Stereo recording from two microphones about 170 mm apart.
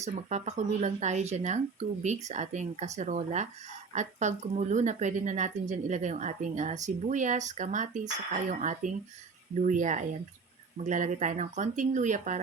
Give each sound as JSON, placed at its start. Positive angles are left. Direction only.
{"t": 0.0, "sound": "a woman's voice", "side_deg": -40}